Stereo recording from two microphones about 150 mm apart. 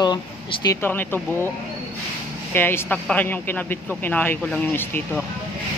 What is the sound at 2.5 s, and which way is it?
Speech, 15° left (ahead or behind).